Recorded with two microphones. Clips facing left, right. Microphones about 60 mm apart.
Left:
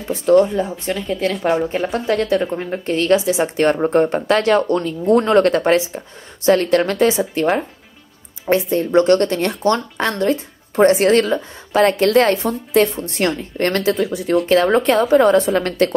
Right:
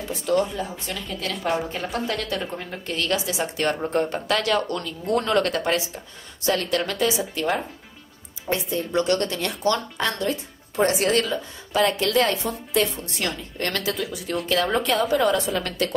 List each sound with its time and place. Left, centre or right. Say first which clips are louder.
0.1 s a woman's voice: left 10 dB; left
1.7 s a woman's voice: left 8 dB; left